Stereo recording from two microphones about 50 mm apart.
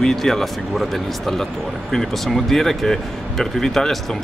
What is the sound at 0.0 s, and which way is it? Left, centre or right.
Speech, centre.